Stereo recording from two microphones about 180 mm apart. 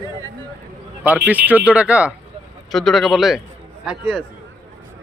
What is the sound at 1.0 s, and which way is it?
Speech, 10° right (ahead or behind).